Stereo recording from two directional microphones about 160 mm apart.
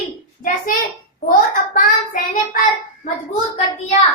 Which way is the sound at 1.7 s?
60° left (ahead or behind).